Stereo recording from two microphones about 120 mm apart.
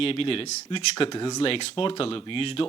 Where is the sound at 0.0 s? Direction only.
50° left (ahead or behind).